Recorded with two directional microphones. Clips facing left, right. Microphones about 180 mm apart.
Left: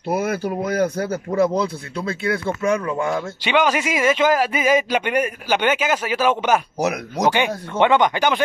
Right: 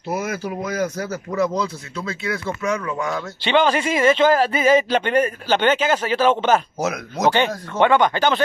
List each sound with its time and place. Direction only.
0.1 s speech: 60° left (ahead or behind)
0.8 s speech: 30° left (ahead or behind)
2.0 s speech: 55° left (ahead or behind)
2.4 s speech: 30° left (ahead or behind)
3.4 s a man's voice: 10° left (ahead or behind)